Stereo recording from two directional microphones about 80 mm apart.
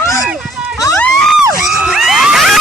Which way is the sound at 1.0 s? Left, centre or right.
Centre.